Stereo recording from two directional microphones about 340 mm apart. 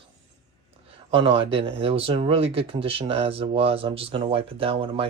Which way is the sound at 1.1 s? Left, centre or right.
Centre.